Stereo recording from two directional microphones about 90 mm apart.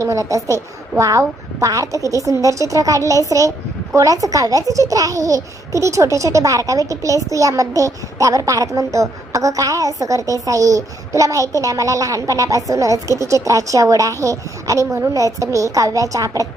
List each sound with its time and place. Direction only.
0.0 s a child's voice: 35° right (ahead or behind)